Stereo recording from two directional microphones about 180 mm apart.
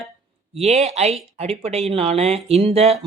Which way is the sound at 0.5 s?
35° right (ahead or behind).